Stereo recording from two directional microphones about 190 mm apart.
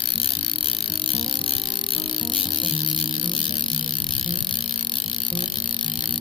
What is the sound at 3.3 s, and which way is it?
Insect, 25° left (ahead or behind).